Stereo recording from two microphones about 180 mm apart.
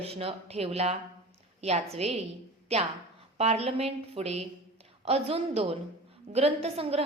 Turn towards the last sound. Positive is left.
turn(degrees=-35)  # may be behind; listen again after turning